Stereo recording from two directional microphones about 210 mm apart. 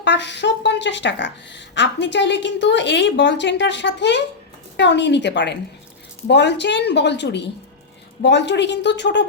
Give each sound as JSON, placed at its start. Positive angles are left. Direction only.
{"t": 0.0, "sound": "a woman's voice", "side_deg": 55}